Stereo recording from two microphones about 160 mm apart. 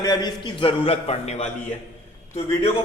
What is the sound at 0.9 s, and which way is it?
Speech, 40° left (ahead or behind).